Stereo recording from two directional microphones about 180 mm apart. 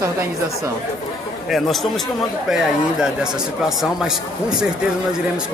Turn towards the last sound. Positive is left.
turn(degrees=-5)  # may be behind; listen again after turning